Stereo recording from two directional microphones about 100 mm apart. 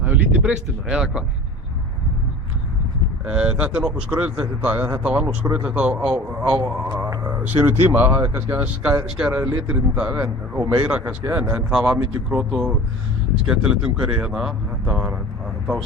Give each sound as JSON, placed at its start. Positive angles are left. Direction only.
{"t": 0.0, "sound": "speech", "side_deg": -15}
{"t": 3.2, "sound": "a man's voice", "side_deg": -10}
{"t": 7.0, "sound": "a man's voice", "side_deg": -25}